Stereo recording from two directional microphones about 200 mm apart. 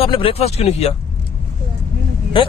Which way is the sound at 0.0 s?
30° left (ahead or behind).